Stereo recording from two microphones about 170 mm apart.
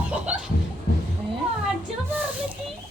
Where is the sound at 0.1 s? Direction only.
5° right (ahead or behind).